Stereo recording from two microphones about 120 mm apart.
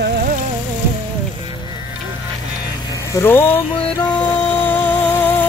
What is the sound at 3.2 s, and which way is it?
Speech, 20° left (ahead or behind).